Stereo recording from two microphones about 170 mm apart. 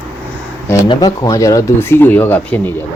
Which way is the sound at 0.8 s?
25° left (ahead or behind).